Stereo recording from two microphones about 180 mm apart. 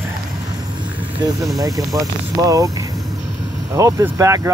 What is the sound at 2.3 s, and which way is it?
Speech, 20° right (ahead or behind).